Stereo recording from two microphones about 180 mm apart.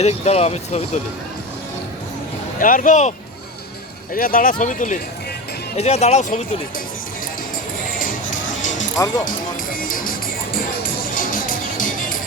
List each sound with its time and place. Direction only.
0.0 s speech: 35° left (ahead or behind)
2.6 s speech: 45° left (ahead or behind)
7.9 s music: 50° left (ahead or behind)
9.7 s music: 50° left (ahead or behind)